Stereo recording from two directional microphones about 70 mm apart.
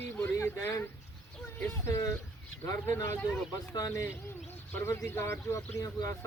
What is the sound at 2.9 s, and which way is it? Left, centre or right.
Speech, left.